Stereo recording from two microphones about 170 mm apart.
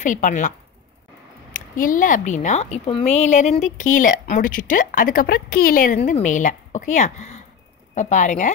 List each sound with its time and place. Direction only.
0.0 s speech: 50° left (ahead or behind)
5.9 s speech: 45° left (ahead or behind)